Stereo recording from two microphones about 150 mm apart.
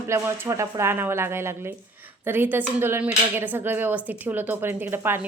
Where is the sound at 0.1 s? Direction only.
20° right (ahead or behind).